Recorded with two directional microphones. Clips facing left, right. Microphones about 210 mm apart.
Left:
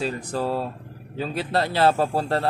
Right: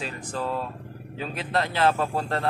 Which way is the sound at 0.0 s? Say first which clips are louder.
Left 5 dB; 35° left (ahead or behind).